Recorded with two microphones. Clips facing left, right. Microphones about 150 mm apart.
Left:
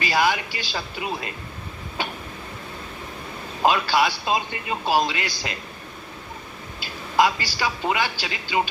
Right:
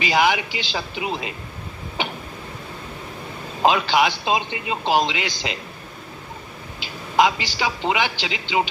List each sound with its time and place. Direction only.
0.0 s a man's voice: 20° right (ahead or behind)
3.6 s a man's voice: 20° right (ahead or behind)
6.7 s a man's voice: 20° right (ahead or behind)